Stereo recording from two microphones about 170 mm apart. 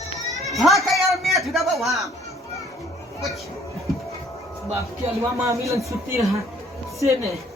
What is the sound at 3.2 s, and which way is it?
Speech, centre (ahead or behind).